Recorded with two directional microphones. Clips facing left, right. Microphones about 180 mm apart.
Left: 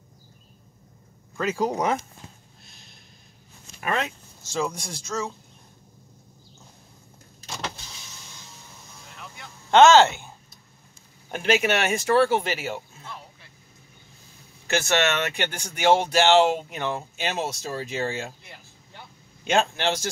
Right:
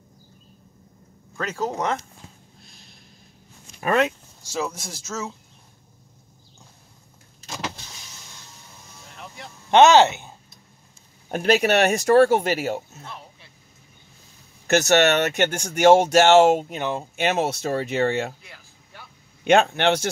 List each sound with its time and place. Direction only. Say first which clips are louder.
1.3 s speech: left 2 dB; 5° left (ahead or behind)
2.6 s snort: right 2 dB; centre (ahead or behind)
4.4 s speech: left 1 dB; 5° right (ahead or behind)
9.7 s speech: right 1 dB; 15° right (ahead or behind)
11.2 s speech: right 3 dB; 35° right (ahead or behind)
14.7 s speech: right 6 dB; 40° right (ahead or behind)
16.7 s speech: right 2 dB; 20° right (ahead or behind)
17.2 s speech: right 9 dB; 60° right (ahead or behind)
19.4 s speech: right 6 dB; 60° right (ahead or behind)